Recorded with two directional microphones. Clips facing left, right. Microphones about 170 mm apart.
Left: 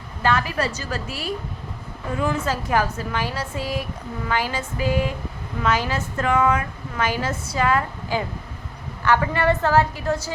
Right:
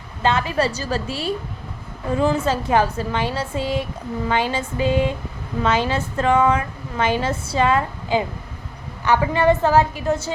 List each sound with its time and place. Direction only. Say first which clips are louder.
0.2 s a woman's voice: right 3 dB; 20° right (ahead or behind)